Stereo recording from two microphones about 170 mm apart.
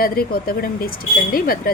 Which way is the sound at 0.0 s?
60° left (ahead or behind).